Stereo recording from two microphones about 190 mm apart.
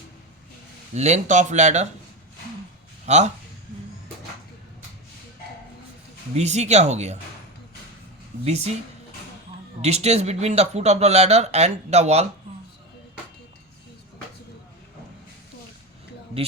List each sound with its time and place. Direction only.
0.9 s speech: 35° right (ahead or behind)
3.1 s speech: 35° right (ahead or behind)
6.3 s speech: 35° right (ahead or behind)
8.4 s speech: 35° right (ahead or behind)
9.8 s speech: 35° right (ahead or behind)